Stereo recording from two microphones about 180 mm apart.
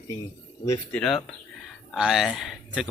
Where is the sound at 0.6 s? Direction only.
20° left (ahead or behind).